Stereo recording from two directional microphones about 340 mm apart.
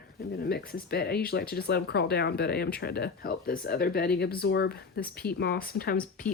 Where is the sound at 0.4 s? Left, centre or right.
Left.